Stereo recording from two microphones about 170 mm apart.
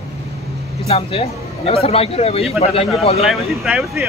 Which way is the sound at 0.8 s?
35° left (ahead or behind).